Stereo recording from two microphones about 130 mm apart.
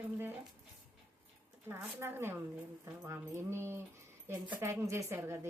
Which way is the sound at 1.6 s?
20° right (ahead or behind).